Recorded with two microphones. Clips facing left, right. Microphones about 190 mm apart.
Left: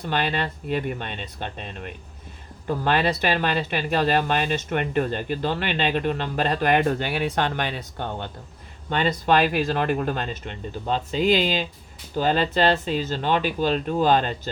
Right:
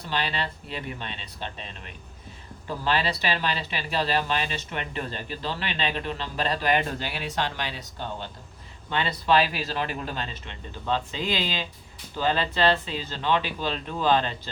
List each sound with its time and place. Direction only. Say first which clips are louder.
0.0 s speech: left 5 dB; 50° left (ahead or behind)
8.9 s speech: left 3 dB; 45° left (ahead or behind)